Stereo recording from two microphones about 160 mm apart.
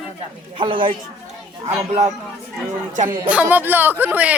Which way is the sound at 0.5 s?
30° right (ahead or behind).